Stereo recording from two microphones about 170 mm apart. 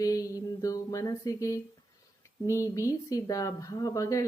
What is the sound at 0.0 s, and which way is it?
A woman's voice, 20° left (ahead or behind).